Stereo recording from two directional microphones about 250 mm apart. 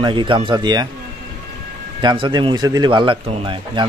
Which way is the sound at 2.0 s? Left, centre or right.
Centre.